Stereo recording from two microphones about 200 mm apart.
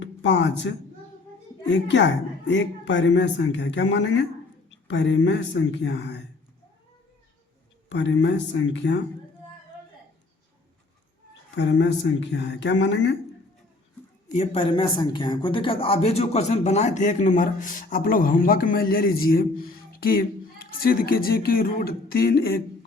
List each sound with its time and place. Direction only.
0.0 s speech: 65° left (ahead or behind)
1.7 s speech: 65° left (ahead or behind)
7.9 s speech: 65° left (ahead or behind)
11.5 s speech: 65° left (ahead or behind)
14.3 s speech: 30° left (ahead or behind); by 22.5 s 50° left (ahead or behind)